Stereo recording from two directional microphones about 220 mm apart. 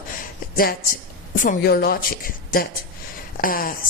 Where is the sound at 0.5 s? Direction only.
40° left (ahead or behind).